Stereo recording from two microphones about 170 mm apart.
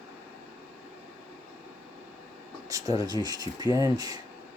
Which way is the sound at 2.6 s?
20° right (ahead or behind).